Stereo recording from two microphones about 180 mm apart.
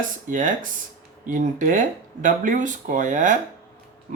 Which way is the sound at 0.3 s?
45° right (ahead or behind).